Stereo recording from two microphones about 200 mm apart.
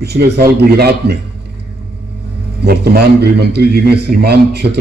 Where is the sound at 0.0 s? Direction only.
55° right (ahead or behind).